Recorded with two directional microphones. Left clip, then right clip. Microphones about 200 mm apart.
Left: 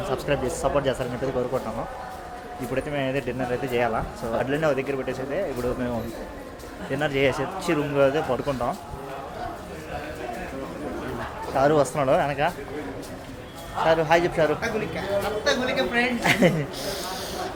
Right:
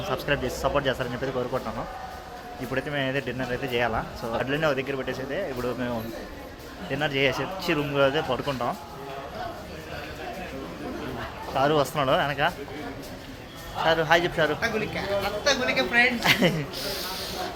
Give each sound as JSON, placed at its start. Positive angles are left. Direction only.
{"t": 0.1, "sound": "speech", "side_deg": 0}
{"t": 2.7, "sound": "speech", "side_deg": 0}
{"t": 6.9, "sound": "speech", "side_deg": 5}
{"t": 11.5, "sound": "speech", "side_deg": 10}
{"t": 13.8, "sound": "speech", "side_deg": 10}
{"t": 15.4, "sound": "a woman's voice", "side_deg": -10}
{"t": 16.2, "sound": "speech", "side_deg": 20}